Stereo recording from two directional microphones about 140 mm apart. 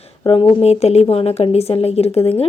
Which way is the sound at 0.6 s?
50° left (ahead or behind).